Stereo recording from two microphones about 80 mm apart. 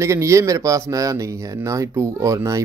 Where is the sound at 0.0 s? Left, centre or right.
Right.